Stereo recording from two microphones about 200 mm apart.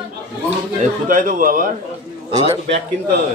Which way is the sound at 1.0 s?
40° right (ahead or behind).